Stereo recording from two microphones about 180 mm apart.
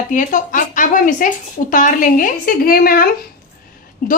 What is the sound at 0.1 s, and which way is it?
A woman's voice, 45° left (ahead or behind).